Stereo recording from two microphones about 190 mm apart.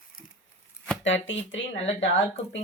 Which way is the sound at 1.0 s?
80° left.